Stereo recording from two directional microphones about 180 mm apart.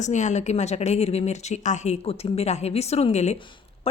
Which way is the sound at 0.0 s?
40° left (ahead or behind).